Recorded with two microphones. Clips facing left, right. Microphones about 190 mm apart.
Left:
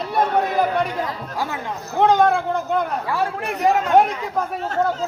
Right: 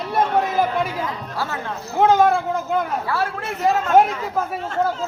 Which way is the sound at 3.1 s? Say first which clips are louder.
Left 1 dB; 15° left (ahead or behind).